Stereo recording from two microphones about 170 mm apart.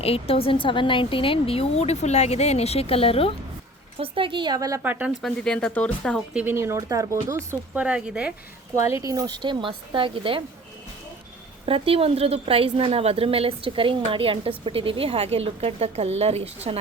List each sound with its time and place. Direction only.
0.0 s a woman's voice: 35° left (ahead or behind)
3.9 s speech: 30° right (ahead or behind)
4.8 s speech: 10° right (ahead or behind)
5.2 s speech: 5° left (ahead or behind)
6.4 s speech: 15° right (ahead or behind)
8.7 s speech: 20° right (ahead or behind)
11.6 s a woman's voice: 35° right (ahead or behind)